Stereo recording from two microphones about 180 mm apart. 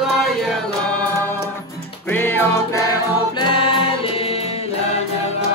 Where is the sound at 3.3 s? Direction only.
30° left (ahead or behind).